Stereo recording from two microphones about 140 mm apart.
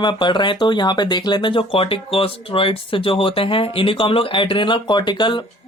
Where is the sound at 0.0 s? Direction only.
35° left (ahead or behind).